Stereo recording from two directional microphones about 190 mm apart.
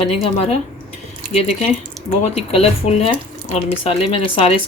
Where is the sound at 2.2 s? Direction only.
35° left (ahead or behind).